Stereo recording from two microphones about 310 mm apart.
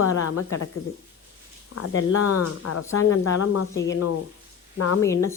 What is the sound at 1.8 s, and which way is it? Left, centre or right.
Speech, left.